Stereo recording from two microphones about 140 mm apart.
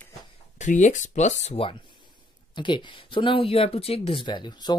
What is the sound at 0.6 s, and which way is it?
Speech, 60° left (ahead or behind).